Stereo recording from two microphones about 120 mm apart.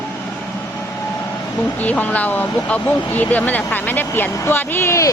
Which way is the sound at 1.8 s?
15° left (ahead or behind).